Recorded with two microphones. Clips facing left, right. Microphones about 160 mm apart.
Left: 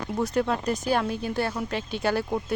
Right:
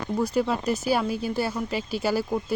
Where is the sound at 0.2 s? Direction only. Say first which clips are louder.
Even; centre (ahead or behind).